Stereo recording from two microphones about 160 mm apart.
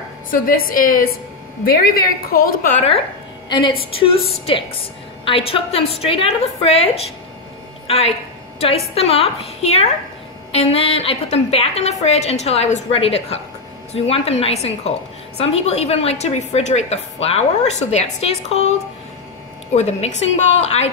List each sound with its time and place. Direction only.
0.3 s a woman's voice: 60° left (ahead or behind)
1.6 s a woman's voice: 75° left (ahead or behind)
3.4 s a woman's voice: 30° left (ahead or behind)
5.2 s a woman's voice: 35° left (ahead or behind)
7.8 s a sound: 40° left (ahead or behind)
8.5 s a woman's voice: 40° left (ahead or behind)
19.7 s a woman's voice: 45° left (ahead or behind)